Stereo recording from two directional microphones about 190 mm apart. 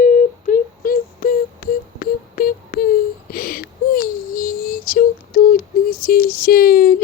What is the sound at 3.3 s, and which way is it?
Child singing, 50° left (ahead or behind).